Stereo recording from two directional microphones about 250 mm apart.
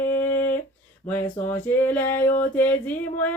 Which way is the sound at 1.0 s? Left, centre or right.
Centre.